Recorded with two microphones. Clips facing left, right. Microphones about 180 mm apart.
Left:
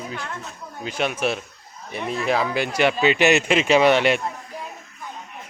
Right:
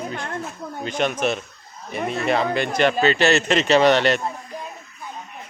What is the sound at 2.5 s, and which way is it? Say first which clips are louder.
Speech: right 1 dB; 10° left (ahead or behind).